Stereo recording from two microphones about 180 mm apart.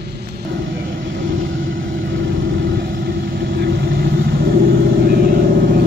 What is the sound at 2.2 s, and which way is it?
Vehicle, 85° right.